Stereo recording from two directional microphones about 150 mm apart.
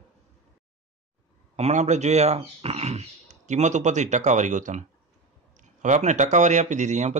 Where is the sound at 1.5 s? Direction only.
50° right (ahead or behind).